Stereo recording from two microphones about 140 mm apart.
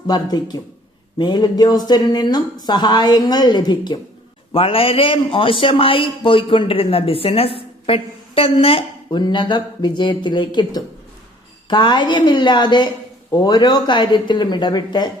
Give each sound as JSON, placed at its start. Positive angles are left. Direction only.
{"t": 0.1, "sound": "a man's voice", "side_deg": 30}